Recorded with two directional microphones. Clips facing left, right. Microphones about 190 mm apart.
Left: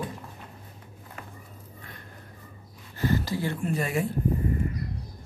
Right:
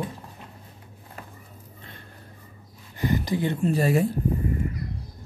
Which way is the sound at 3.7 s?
35° right (ahead or behind).